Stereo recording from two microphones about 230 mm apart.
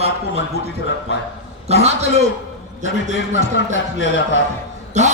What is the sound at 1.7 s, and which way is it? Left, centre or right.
Speech, right.